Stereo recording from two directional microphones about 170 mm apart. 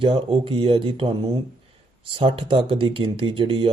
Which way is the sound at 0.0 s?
30° right (ahead or behind).